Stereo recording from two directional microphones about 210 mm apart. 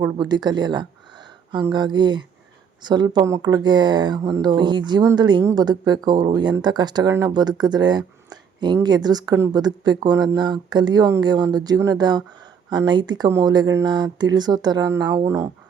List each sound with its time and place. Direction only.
0.0 s speech: 20° right (ahead or behind)